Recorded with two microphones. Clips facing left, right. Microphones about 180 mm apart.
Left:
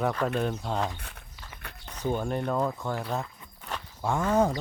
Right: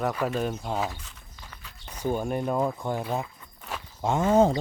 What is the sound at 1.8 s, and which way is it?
Speech, 10° right (ahead or behind).